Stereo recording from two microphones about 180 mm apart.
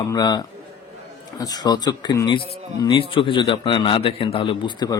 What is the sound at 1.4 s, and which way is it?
Speech, 20° left (ahead or behind).